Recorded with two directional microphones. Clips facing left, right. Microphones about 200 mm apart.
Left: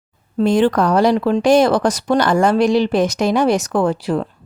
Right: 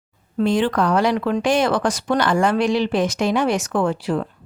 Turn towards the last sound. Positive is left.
turn(degrees=40)  # may be behind; listen again after turning